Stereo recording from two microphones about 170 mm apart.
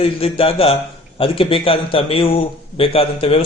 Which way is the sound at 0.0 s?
35° left (ahead or behind).